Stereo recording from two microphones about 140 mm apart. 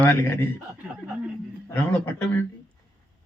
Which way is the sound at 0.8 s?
10° right (ahead or behind).